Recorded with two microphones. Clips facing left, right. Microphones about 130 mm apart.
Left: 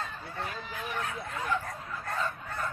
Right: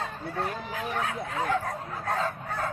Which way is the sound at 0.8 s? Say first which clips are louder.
Right 4 dB; 80° right.